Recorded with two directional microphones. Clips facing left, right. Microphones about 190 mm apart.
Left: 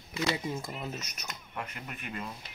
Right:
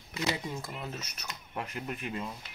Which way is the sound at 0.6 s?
20° left (ahead or behind).